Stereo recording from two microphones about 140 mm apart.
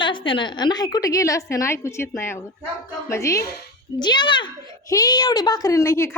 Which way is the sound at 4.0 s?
35° left (ahead or behind).